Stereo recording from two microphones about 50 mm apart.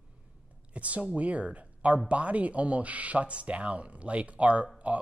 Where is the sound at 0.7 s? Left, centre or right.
Right.